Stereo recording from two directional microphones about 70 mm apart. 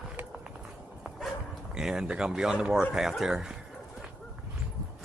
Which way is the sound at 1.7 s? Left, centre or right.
Centre.